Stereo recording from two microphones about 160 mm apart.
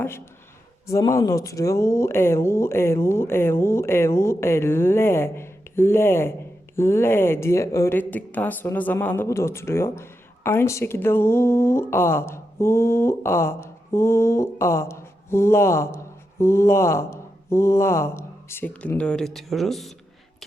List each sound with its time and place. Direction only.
0.9 s speech: 20° left (ahead or behind); by 20.0 s centre (ahead or behind)